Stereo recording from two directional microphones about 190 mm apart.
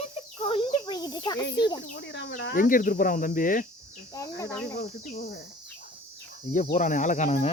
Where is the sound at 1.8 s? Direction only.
55° left (ahead or behind).